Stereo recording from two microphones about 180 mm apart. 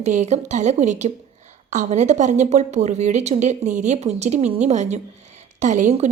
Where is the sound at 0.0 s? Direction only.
40° right (ahead or behind).